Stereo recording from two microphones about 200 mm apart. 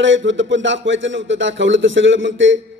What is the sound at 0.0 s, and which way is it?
A man's voice, 65° right (ahead or behind).